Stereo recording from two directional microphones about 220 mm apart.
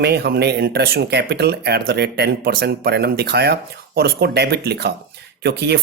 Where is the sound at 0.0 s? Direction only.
50° right (ahead or behind).